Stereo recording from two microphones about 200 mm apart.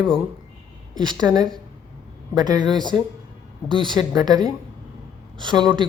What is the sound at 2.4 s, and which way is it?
A man's voice, 20° right (ahead or behind).